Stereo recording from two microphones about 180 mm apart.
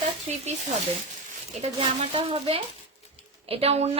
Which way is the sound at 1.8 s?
30° right (ahead or behind).